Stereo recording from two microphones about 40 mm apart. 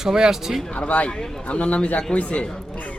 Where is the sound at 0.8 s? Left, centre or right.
Left.